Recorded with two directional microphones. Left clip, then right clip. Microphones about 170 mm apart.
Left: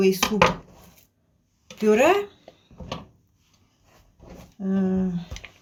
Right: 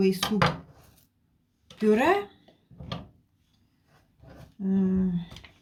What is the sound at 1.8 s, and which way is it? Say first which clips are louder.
Speech: left 4 dB; 20° right (ahead or behind).